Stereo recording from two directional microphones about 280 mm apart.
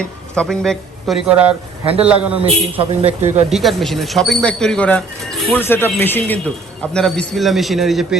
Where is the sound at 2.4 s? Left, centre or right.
Right.